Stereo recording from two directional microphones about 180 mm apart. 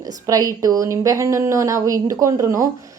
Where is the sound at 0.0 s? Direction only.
20° right (ahead or behind).